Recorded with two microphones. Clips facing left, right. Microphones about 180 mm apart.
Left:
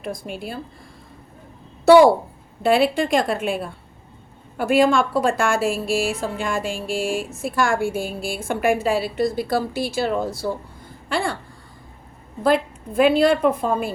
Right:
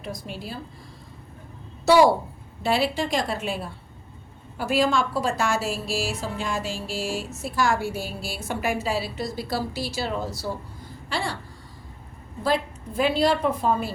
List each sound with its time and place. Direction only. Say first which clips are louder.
0.0 s a woman's voice: left 5 dB; 55° left (ahead or behind)
1.8 s a child's voice: left 6 dB; 55° left (ahead or behind)
12.4 s a woman's voice: left 6 dB; 55° left (ahead or behind)